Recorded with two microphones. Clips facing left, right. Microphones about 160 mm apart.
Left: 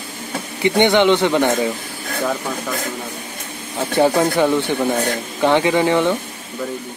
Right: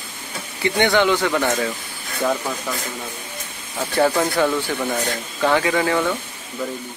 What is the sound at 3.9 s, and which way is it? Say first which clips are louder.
Speech: left 3 dB; 15° left (ahead or behind).